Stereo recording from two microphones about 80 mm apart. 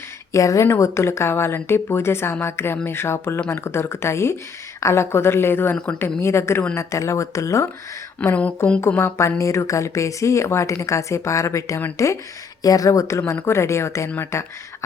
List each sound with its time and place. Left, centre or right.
0.3 s a woman's voice: left
5.7 s speech: centre
6.1 s a woman's voice: left
8.2 s speech: left
8.9 s a woman's voice: left